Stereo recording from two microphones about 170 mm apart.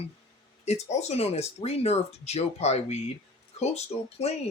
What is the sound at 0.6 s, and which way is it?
Speech, 40° left (ahead or behind).